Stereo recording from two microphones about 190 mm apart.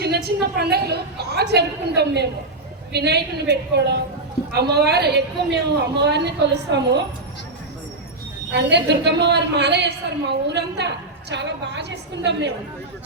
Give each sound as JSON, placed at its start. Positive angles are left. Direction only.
{"t": 0.0, "sound": "a woman's voice", "side_deg": -60}
{"t": 8.5, "sound": "a woman's voice", "side_deg": -65}